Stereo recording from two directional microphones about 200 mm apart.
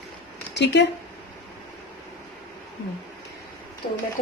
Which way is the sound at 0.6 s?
60° left (ahead or behind).